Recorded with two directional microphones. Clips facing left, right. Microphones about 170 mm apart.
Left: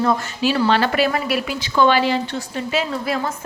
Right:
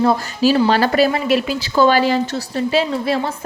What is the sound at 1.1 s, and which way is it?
A woman's voice, 25° right (ahead or behind).